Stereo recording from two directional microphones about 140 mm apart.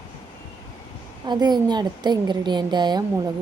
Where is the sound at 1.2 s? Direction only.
30° right (ahead or behind).